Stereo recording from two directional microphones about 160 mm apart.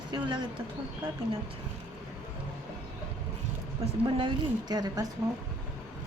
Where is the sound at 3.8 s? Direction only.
35° right (ahead or behind).